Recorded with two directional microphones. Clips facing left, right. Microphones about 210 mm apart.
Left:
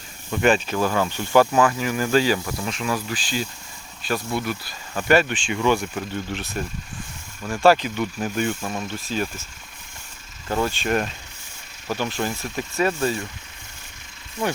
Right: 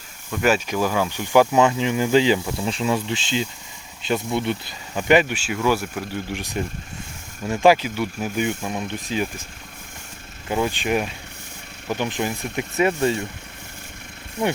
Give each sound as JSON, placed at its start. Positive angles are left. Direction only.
{"t": 0.3, "sound": "speech", "side_deg": -5}
{"t": 7.7, "sound": "speech", "side_deg": -10}
{"t": 10.5, "sound": "speech", "side_deg": -15}